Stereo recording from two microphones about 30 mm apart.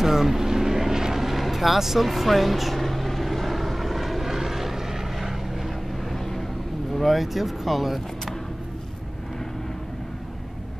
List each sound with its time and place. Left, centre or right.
0.0 s vehicle: centre
6.1 s vehicle: centre
7.2 s speech: centre